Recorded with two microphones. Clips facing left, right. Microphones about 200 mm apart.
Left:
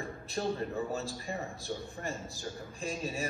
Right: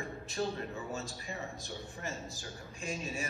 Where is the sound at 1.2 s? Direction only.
50° left (ahead or behind).